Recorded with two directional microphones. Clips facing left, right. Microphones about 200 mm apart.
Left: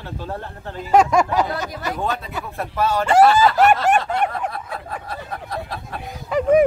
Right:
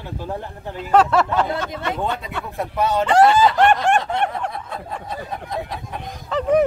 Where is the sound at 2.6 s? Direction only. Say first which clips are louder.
Right 1 dB; 15° right (ahead or behind).